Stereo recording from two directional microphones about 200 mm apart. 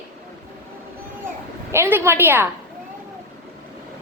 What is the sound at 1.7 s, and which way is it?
Speech, 10° right (ahead or behind).